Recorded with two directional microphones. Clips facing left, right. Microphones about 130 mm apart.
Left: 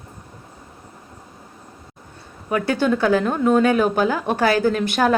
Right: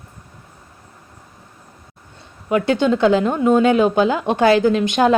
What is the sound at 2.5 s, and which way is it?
A woman's voice, 25° right (ahead or behind).